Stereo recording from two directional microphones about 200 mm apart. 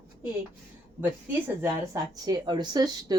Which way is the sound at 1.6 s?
20° right (ahead or behind).